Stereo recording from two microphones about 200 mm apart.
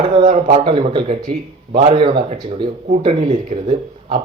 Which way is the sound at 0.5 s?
25° right (ahead or behind).